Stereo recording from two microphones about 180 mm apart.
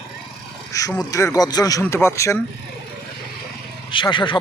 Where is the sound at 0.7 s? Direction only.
20° left (ahead or behind).